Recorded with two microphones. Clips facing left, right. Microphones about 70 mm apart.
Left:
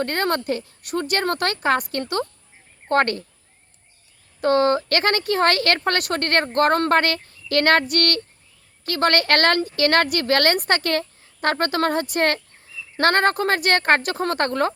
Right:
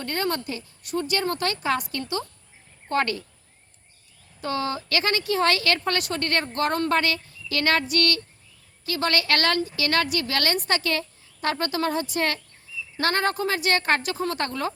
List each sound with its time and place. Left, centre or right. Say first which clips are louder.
0.0 s speech: left 5 dB; left
4.4 s speech: left 10 dB; left